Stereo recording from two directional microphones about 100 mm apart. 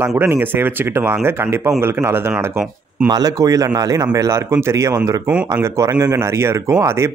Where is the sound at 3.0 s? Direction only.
40° right (ahead or behind).